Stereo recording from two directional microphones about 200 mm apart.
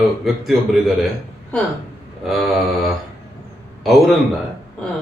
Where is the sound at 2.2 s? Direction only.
Centre (ahead or behind).